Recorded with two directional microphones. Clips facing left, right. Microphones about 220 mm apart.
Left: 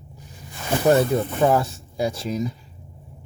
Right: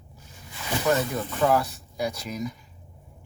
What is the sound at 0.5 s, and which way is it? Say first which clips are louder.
Snake: left 6 dB; 50° left (ahead or behind).